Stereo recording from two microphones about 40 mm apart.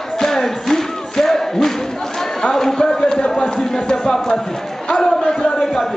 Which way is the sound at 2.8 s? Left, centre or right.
Centre.